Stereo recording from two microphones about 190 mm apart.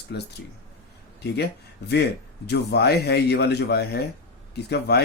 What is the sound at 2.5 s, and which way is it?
Speech, 60° left (ahead or behind).